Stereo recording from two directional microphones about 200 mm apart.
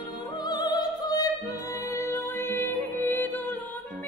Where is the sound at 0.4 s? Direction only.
20° left (ahead or behind).